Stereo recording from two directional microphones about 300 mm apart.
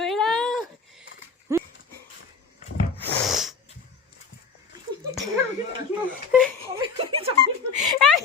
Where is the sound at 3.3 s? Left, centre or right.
Centre.